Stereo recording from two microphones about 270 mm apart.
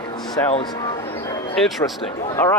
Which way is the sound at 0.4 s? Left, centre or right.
Centre.